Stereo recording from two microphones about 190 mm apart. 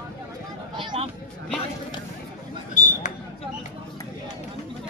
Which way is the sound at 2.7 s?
45° left (ahead or behind).